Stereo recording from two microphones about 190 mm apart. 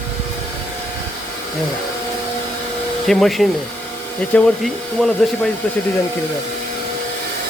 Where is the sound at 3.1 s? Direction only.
Centre (ahead or behind).